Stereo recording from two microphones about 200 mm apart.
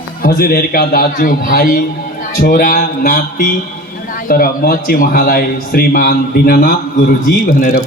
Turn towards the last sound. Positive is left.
turn(degrees=45)  # may be behind; listen again after turning